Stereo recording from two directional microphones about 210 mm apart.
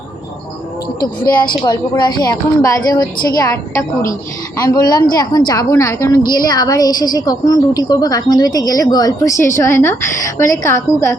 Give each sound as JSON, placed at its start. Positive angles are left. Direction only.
{"t": 1.4, "sound": "speech", "side_deg": 20}